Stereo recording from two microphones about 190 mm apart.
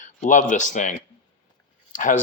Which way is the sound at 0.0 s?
40° left (ahead or behind).